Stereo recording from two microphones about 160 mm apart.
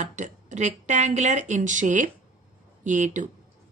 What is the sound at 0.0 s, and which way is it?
A woman's voice, 50° right (ahead or behind).